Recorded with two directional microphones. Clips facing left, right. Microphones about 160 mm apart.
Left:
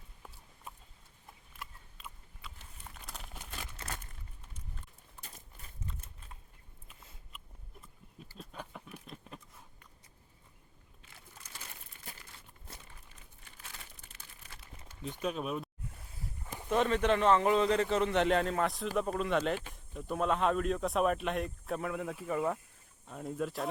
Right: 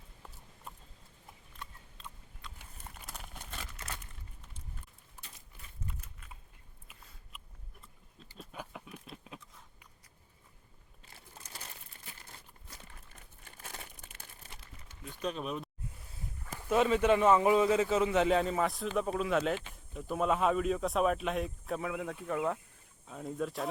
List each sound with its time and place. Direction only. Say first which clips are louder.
1.5 s a sound: even; 5° left (ahead or behind)
2.9 s crumpling: even; centre (ahead or behind)
8.4 s a sound: right 1 dB; centre (ahead or behind)
11.9 s crumpling: left 3 dB; 40° right (ahead or behind)
13.4 s crumpling: right 5 dB; 45° right (ahead or behind)
15.2 s a man's voice: left 1 dB; 5° left (ahead or behind)